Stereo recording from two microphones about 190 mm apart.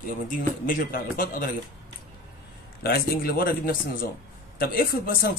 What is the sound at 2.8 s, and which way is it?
Speech, 55° left (ahead or behind).